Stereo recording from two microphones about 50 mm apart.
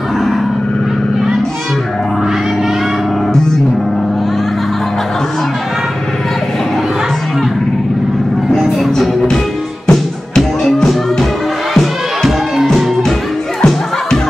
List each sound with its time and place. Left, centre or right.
8.5 s music: centre